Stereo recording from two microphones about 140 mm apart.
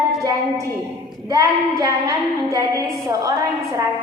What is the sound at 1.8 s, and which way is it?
A woman's voice, 25° right (ahead or behind).